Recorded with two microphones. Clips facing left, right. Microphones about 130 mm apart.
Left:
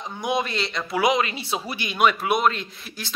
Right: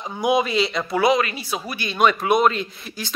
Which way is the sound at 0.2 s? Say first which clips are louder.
Right 6 dB; 5° right (ahead or behind).